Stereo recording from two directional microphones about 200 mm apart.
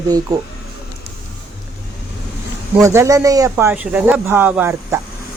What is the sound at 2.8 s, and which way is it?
Speech, 15° right (ahead or behind).